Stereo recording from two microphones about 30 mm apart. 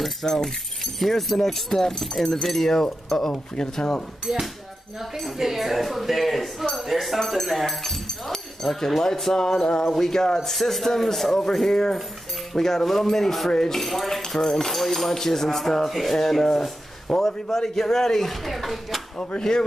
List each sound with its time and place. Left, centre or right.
0.0 s speech: centre
2.0 s speech: centre
4.3 s speech: right
5.4 s speech: centre
13.7 s speech: centre
14.2 s speech: centre
18.3 s speech: centre
19.1 s speech: left